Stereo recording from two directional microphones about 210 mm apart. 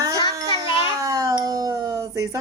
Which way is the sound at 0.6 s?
15° right (ahead or behind).